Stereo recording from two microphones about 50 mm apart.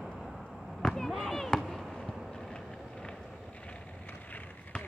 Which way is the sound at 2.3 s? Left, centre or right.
Centre.